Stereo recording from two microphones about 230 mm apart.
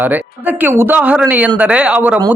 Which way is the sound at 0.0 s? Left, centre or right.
Centre.